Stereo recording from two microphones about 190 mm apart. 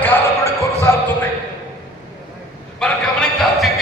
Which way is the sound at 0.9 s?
15° left (ahead or behind).